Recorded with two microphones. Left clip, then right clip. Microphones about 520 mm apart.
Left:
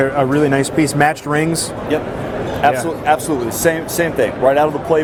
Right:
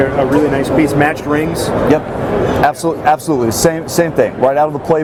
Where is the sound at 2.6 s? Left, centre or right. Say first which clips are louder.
Left 1 dB; right.